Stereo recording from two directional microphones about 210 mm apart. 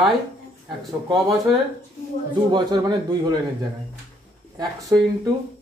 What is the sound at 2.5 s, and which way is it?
Speech, 20° right (ahead or behind).